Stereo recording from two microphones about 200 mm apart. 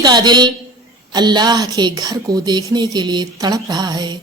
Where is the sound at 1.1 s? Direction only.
20° right (ahead or behind).